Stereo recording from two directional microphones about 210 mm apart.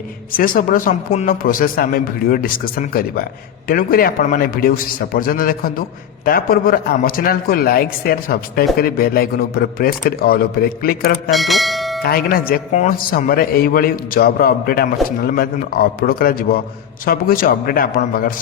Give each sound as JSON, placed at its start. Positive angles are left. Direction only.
{"t": 0.3, "sound": "a man's voice", "side_deg": 40}
{"t": 11.3, "sound": "bell", "side_deg": 0}
{"t": 12.0, "sound": "a man's voice", "side_deg": 45}